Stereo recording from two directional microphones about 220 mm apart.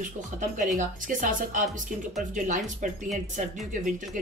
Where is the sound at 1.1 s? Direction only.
35° right (ahead or behind).